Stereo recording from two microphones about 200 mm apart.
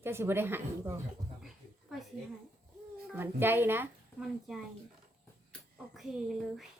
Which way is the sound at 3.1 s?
10° right (ahead or behind).